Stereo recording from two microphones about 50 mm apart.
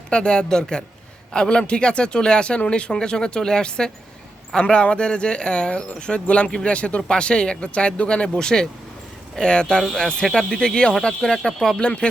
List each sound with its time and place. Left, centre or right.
0.1 s speech: centre
11.8 s speech: left